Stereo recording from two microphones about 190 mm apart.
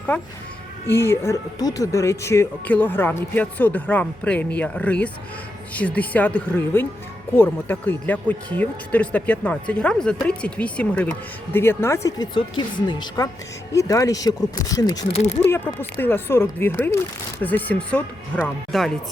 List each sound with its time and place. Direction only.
0.1 s speech: 5° left (ahead or behind)
15.1 s speech: 30° left (ahead or behind)
15.4 s speech: 10° left (ahead or behind)